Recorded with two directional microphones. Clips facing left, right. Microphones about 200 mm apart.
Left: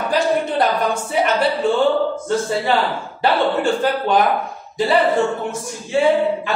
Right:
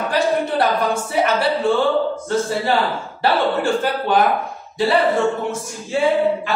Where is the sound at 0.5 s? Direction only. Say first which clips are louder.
Even; 15° left (ahead or behind).